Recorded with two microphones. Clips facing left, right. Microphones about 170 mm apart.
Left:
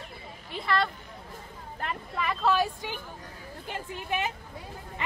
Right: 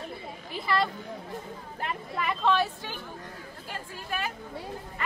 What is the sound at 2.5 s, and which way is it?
Speech, 15° left (ahead or behind).